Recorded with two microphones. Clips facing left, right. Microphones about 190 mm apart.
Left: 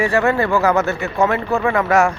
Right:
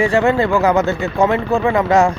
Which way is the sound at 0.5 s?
15° right (ahead or behind).